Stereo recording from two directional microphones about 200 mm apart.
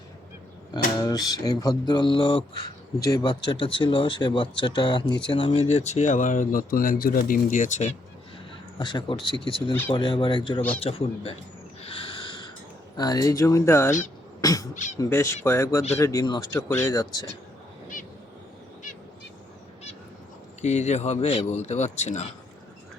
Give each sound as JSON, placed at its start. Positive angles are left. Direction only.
{"t": 0.7, "sound": "speech", "side_deg": 20}
{"t": 8.8, "sound": "speech", "side_deg": 20}
{"t": 11.8, "sound": "owl", "side_deg": 25}
{"t": 13.0, "sound": "speech", "side_deg": 20}
{"t": 20.6, "sound": "speech", "side_deg": 35}